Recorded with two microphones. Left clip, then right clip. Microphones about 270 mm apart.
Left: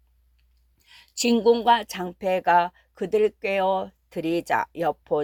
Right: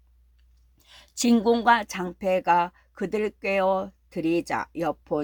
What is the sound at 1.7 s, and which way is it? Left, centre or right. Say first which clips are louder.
Speech: left 1 dB; left.